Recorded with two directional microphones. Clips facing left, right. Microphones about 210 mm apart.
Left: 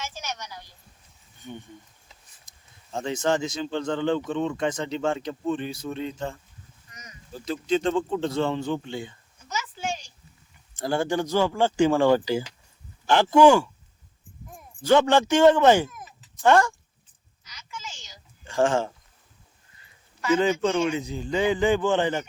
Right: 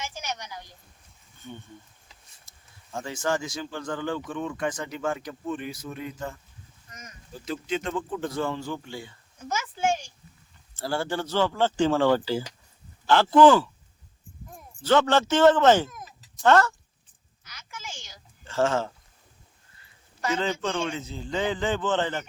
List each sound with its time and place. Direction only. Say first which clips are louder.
0.0 s a sound: even; 15° right (ahead or behind)
1.4 s speech: left 2 dB; 15° left (ahead or behind)
7.7 s speech: left 7 dB; 30° left (ahead or behind)
9.4 s a sound: right 5 dB; 50° right (ahead or behind)
10.8 s a man's voice: left 4 dB; 15° left (ahead or behind)
14.8 s a man's voice: left 2 dB; 15° left (ahead or behind)
17.4 s a sound: left 1 dB; 55° right (ahead or behind)
18.4 s speech: left 2 dB; 15° left (ahead or behind)
20.4 s a man's voice: left 6 dB; 15° left (ahead or behind)